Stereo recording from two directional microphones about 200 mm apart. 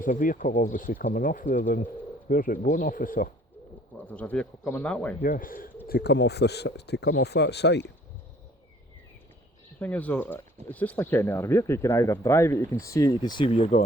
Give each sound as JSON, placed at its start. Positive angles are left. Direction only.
{"t": 0.0, "sound": "speech", "side_deg": 40}
{"t": 3.9, "sound": "speech", "side_deg": 5}
{"t": 5.2, "sound": "speech", "side_deg": 45}
{"t": 5.9, "sound": "speech", "side_deg": 55}
{"t": 9.8, "sound": "speech", "side_deg": 10}